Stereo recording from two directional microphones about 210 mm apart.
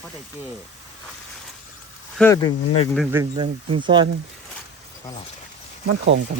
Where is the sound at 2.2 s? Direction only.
15° left (ahead or behind).